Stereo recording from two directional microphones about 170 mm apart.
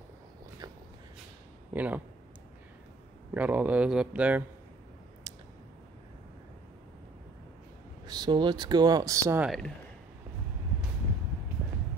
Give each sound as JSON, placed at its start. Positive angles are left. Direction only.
{"t": 1.7, "sound": "speech", "side_deg": -10}
{"t": 3.3, "sound": "speech", "side_deg": -10}
{"t": 5.3, "sound": "tick", "side_deg": -20}
{"t": 8.1, "sound": "speech", "side_deg": -25}